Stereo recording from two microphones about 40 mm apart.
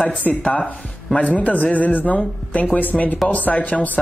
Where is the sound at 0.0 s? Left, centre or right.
Left.